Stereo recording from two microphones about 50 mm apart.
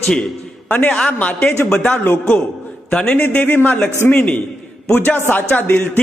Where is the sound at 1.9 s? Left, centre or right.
Left.